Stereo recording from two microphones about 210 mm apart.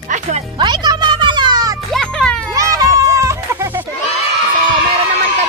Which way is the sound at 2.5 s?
15° right (ahead or behind).